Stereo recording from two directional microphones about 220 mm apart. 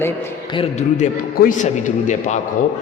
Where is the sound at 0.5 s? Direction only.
30° left (ahead or behind).